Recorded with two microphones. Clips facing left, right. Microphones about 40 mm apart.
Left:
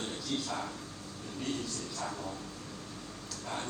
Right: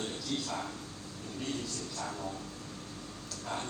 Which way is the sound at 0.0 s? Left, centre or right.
Left.